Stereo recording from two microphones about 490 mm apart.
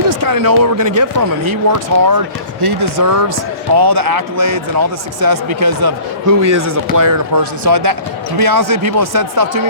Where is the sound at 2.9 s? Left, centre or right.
Right.